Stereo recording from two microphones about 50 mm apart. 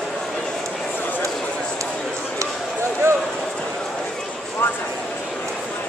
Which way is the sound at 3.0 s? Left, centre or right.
Right.